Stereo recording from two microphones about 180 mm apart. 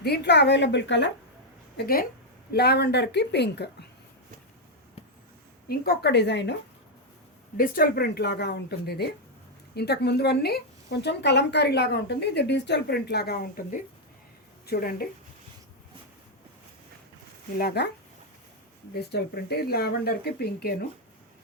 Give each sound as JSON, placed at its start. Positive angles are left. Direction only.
{"t": 0.0, "sound": "a woman's voice", "side_deg": 65}
{"t": 1.7, "sound": "a woman's voice", "side_deg": 55}
{"t": 5.6, "sound": "a woman's voice", "side_deg": 55}
{"t": 7.5, "sound": "a woman's voice", "side_deg": 55}
{"t": 14.7, "sound": "a woman's voice", "side_deg": 55}
{"t": 17.6, "sound": "a woman's voice", "side_deg": 65}
{"t": 18.9, "sound": "a woman's voice", "side_deg": 60}